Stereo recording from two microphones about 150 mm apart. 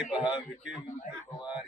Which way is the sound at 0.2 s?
30° left (ahead or behind).